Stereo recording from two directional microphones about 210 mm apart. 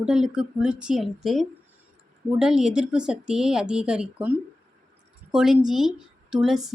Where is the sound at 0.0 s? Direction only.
5° right (ahead or behind).